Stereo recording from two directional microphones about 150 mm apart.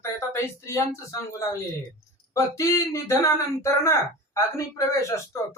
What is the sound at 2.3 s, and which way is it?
Speech, 20° left (ahead or behind).